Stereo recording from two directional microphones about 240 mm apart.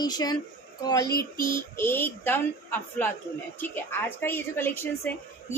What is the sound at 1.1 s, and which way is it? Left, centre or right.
Child singing, left.